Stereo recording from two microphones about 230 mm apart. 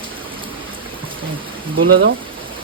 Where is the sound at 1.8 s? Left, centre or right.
Right.